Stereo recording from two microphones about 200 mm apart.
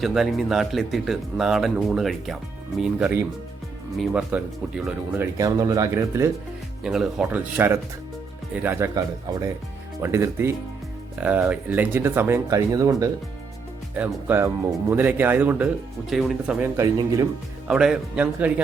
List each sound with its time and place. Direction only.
0.0 s speech: centre (ahead or behind)
5.2 s speech: 15° right (ahead or behind)
6.8 s speech: 5° right (ahead or behind)
10.0 s speech: 15° right (ahead or behind)
16.6 s speech: 15° right (ahead or behind)
17.7 s speech: 5° right (ahead or behind)